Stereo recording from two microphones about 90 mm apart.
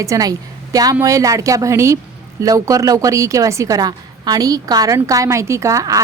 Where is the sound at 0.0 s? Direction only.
40° right (ahead or behind).